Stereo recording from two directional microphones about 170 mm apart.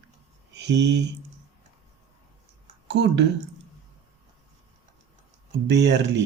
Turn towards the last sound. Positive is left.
turn(degrees=-85)